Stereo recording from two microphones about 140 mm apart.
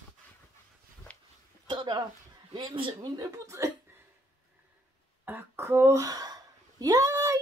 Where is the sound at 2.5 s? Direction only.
35° right (ahead or behind).